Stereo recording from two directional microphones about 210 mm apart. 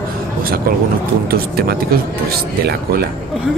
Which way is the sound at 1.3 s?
45° right (ahead or behind).